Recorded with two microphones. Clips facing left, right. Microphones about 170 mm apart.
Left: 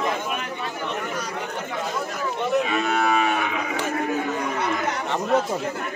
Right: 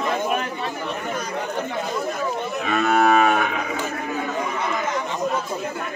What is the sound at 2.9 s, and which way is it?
Moo, 45° right (ahead or behind).